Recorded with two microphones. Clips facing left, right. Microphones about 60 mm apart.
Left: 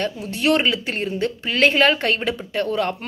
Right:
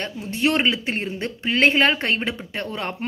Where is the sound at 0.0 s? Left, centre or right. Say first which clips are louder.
Left 1 dB; right.